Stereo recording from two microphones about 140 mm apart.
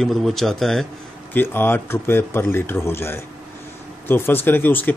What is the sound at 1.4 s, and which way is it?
Speech, 15° left (ahead or behind).